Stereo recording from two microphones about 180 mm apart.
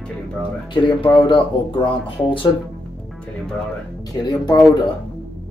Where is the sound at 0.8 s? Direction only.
25° left (ahead or behind).